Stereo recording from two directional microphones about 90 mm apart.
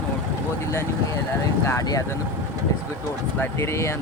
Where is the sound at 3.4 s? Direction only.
30° left (ahead or behind).